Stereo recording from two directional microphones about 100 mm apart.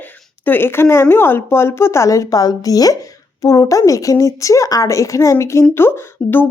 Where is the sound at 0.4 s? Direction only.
20° left (ahead or behind).